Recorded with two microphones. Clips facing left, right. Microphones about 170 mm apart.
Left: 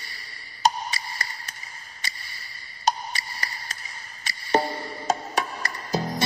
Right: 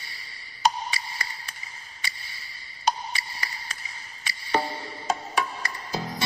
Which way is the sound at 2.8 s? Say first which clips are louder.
Left 1 dB; 45° left (ahead or behind).